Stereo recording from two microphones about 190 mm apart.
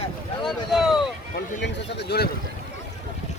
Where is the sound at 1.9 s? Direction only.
60° left (ahead or behind).